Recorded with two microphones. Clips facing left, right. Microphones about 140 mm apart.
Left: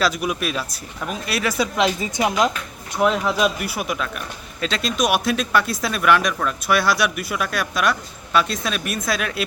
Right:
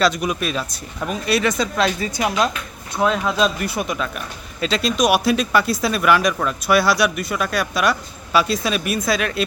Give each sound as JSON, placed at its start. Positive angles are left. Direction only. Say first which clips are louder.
{"t": 0.0, "sound": "speech", "louder": "right 2 dB", "side_deg": 5}
{"t": 3.0, "sound": "speech", "louder": "even", "side_deg": -20}
{"t": 3.3, "sound": "speech", "louder": "right 1 dB", "side_deg": 10}